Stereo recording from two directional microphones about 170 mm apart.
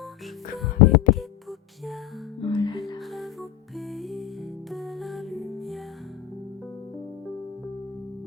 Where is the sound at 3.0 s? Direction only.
Centre (ahead or behind).